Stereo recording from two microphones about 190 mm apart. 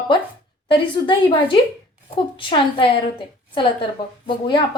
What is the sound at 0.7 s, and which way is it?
A woman's voice, 25° left (ahead or behind).